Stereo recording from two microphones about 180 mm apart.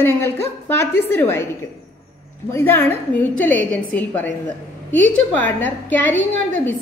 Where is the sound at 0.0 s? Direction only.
15° left (ahead or behind).